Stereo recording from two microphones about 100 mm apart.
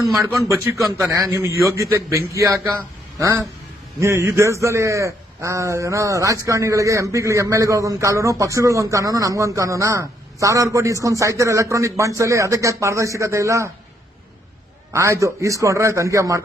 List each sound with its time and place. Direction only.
0.3 s a man's voice: 30° right (ahead or behind)
14.9 s a man's voice: 30° right (ahead or behind)